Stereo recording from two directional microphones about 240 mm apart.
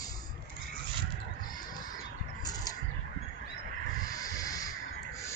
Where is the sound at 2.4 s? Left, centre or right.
Centre.